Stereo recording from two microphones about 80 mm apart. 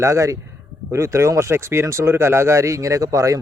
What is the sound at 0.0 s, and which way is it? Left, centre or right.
Speech, right.